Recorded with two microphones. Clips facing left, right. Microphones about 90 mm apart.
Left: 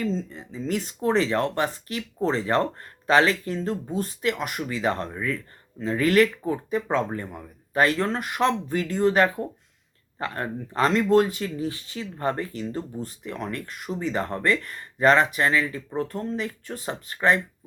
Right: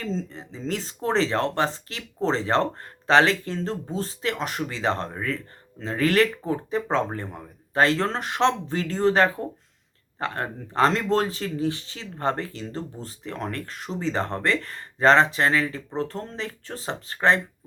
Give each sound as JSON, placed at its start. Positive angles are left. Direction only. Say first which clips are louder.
{"t": 0.0, "sound": "speech", "louder": "left 2 dB", "side_deg": -35}